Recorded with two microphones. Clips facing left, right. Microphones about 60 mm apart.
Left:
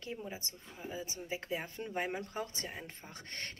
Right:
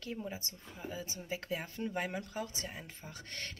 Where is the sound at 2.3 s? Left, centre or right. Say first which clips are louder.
Even; left.